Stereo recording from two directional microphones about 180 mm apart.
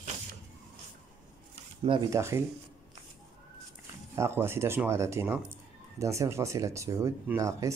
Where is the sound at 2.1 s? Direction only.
15° right (ahead or behind).